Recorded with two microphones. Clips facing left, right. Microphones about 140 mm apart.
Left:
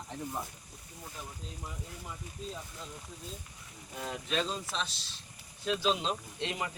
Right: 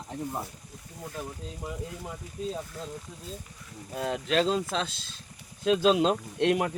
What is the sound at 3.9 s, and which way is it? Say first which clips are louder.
Speech: right 8 dB; 70° right (ahead or behind).